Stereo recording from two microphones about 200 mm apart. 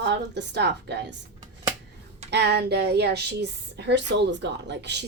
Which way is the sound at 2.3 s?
55° right (ahead or behind).